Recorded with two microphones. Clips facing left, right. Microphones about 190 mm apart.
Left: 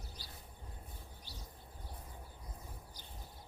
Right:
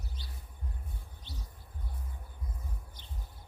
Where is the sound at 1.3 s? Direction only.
25° right (ahead or behind).